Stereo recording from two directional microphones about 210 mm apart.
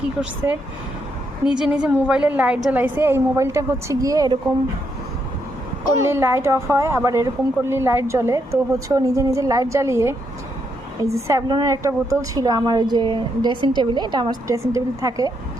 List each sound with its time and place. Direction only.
1.5 s a woman's voice: 5° right (ahead or behind)
6.0 s a woman's voice: 10° right (ahead or behind)